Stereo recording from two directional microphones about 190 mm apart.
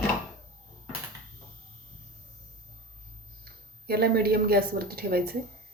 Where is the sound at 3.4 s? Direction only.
55° right (ahead or behind).